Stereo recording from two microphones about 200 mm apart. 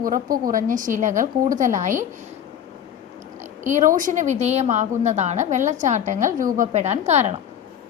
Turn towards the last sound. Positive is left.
turn(degrees=-35)  # may be behind; listen again after turning